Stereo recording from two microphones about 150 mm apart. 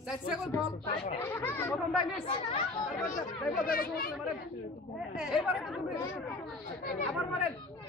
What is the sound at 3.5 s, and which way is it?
Speech, 75° left (ahead or behind).